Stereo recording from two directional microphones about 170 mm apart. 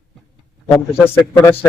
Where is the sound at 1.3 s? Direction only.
15° left (ahead or behind).